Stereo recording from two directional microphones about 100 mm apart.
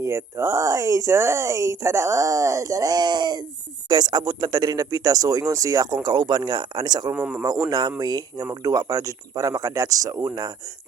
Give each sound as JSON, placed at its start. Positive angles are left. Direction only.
{"t": 0.0, "sound": "speech", "side_deg": -25}
{"t": 7.1, "sound": "speech", "side_deg": -15}
{"t": 7.7, "sound": "speech", "side_deg": -45}